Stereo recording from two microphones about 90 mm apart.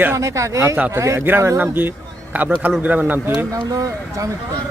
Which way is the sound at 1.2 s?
25° right (ahead or behind).